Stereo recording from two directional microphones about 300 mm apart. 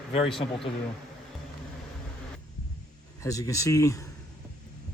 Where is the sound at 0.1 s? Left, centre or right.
Centre.